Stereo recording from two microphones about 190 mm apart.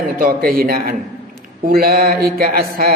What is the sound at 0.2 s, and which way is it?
A man's voice, 50° right (ahead or behind).